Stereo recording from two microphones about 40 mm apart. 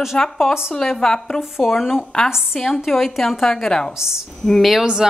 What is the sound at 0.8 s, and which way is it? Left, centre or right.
A woman's voice, centre.